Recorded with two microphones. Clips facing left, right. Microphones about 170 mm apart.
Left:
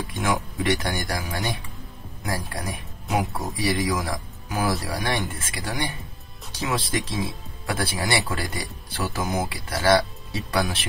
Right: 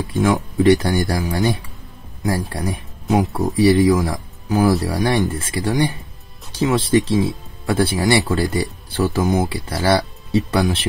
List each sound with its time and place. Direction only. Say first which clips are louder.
0.1 s speech: right 9 dB; 30° right (ahead or behind)